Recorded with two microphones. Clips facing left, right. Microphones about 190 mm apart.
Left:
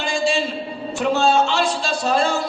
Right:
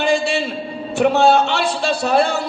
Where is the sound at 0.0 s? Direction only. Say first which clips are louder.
Right 3 dB; 60° right (ahead or behind).